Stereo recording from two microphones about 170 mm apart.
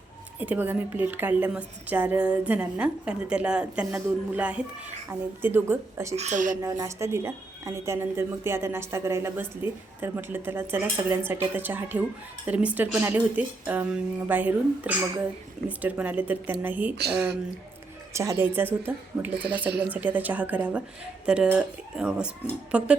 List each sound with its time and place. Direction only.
0.3 s a woman's voice: 10° right (ahead or behind)
6.1 s a woman's voice: 45° right (ahead or behind)
6.6 s a woman's voice: 20° right (ahead or behind)
18.1 s a woman's voice: 15° right (ahead or behind)